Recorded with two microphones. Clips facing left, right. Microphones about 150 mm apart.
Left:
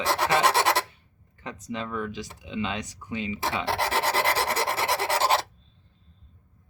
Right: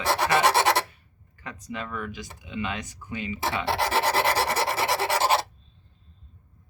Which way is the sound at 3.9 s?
15° right (ahead or behind).